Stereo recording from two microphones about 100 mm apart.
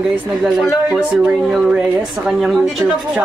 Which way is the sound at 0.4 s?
5° right (ahead or behind).